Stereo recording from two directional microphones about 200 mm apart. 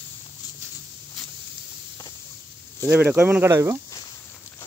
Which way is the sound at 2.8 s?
10° right (ahead or behind).